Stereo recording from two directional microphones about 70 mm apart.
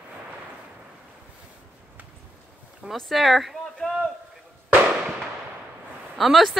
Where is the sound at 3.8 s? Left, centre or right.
Centre.